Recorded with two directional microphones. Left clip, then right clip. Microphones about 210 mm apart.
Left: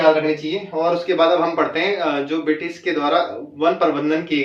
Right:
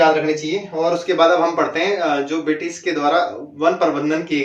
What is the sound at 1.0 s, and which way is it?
Speech, centre (ahead or behind).